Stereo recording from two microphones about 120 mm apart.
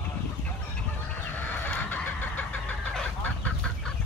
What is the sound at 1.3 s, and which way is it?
Chicken, 15° left (ahead or behind).